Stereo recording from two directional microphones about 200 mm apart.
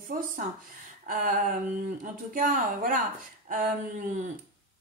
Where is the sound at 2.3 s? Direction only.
45° right (ahead or behind).